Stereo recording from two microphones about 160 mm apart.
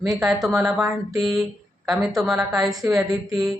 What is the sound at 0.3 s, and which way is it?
Speech, 20° right (ahead or behind).